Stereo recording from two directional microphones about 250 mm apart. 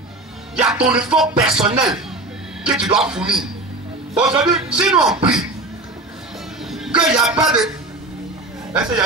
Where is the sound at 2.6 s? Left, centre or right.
Centre.